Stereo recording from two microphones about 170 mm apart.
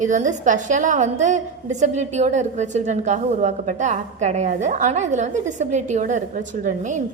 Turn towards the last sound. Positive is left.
turn(degrees=-45)  # may be behind; listen again after turning